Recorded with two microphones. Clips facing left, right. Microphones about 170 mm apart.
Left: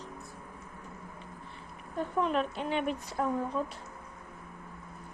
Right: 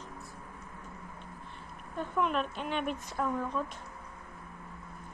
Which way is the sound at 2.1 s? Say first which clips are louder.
Left 1 dB; 30° left (ahead or behind).